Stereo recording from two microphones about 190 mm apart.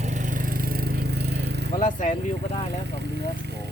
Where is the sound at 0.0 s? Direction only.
40° right (ahead or behind); by 1.7 s 60° right (ahead or behind).